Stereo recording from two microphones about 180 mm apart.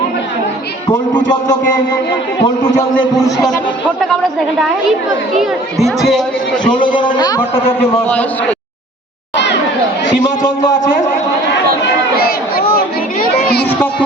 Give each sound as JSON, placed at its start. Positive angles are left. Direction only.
{"t": 2.4, "sound": "a man's voice", "side_deg": 25}
{"t": 4.0, "sound": "a woman's voice", "side_deg": 0}
{"t": 6.0, "sound": "a woman's voice", "side_deg": 0}
{"t": 6.9, "sound": "a man's voice", "side_deg": 25}
{"t": 8.0, "sound": "a man's voice", "side_deg": 10}
{"t": 9.3, "sound": "a sound", "side_deg": 75}
{"t": 12.7, "sound": "children playing", "side_deg": 60}